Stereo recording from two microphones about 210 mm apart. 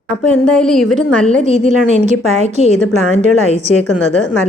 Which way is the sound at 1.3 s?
35° right (ahead or behind).